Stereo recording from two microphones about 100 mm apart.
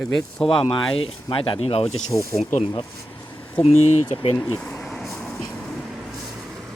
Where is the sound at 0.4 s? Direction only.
65° left (ahead or behind); by 1.9 s 80° left.